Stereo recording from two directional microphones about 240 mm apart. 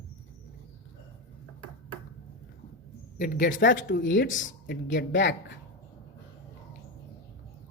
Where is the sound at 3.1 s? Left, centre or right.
Left.